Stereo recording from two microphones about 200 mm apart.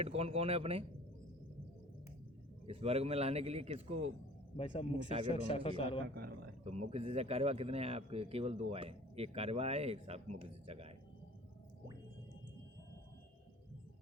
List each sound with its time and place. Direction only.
0.0 s speech: 30° right (ahead or behind)
2.6 s speech: 30° right (ahead or behind)
4.5 s speech: 30° left (ahead or behind)
6.1 s speech: 50° right (ahead or behind)
6.7 s speech: 30° right (ahead or behind)